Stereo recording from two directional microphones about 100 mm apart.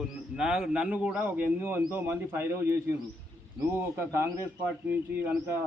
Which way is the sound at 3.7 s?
25° right (ahead or behind).